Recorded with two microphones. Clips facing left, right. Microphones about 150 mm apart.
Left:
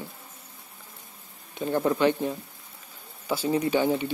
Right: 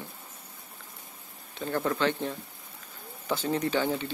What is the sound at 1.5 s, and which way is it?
Speech, 15° left (ahead or behind).